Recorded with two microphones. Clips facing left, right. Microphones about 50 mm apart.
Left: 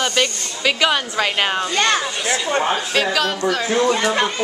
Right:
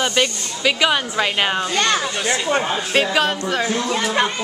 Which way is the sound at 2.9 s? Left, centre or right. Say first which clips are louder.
Right 1 dB; right.